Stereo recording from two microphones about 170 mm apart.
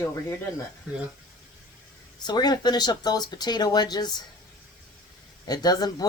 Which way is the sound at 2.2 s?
25° left (ahead or behind).